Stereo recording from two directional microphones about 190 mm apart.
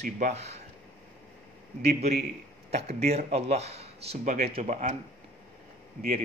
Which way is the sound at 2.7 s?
35° right (ahead or behind).